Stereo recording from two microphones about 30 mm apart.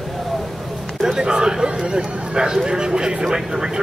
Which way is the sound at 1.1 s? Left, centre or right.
Right.